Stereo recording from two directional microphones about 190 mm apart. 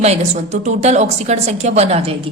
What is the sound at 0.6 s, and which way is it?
A woman's voice, 35° right (ahead or behind).